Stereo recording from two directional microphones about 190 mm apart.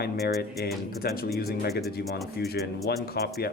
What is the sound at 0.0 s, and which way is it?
Speech, 55° left (ahead or behind).